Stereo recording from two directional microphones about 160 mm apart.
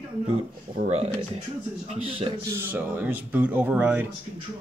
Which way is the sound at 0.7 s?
45° right (ahead or behind).